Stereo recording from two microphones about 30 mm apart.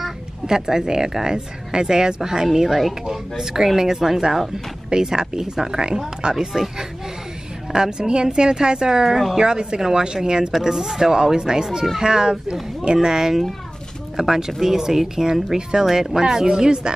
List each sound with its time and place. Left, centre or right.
0.5 s speech: centre
2.4 s speech: centre; by 6.4 s right
7.7 s speech: right